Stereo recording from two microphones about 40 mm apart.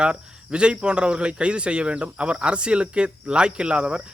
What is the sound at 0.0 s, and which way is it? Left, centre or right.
Speech, right.